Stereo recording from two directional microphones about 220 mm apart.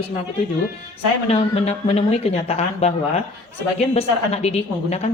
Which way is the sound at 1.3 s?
25° left (ahead or behind).